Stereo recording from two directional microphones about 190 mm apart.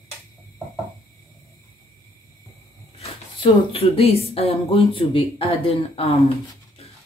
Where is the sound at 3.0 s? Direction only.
30° left (ahead or behind).